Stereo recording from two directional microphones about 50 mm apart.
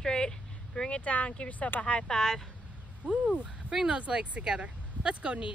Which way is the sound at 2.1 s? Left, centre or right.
Centre.